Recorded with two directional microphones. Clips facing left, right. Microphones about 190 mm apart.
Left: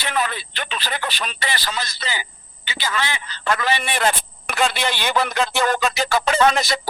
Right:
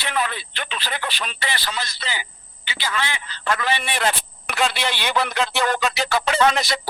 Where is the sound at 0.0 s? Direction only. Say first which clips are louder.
Left 1 dB; 40° left (ahead or behind).